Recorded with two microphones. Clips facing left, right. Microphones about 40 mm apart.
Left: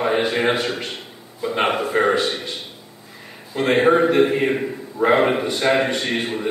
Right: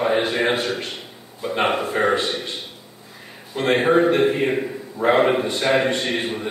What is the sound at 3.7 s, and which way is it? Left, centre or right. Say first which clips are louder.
A man's voice: left 1 dB; centre.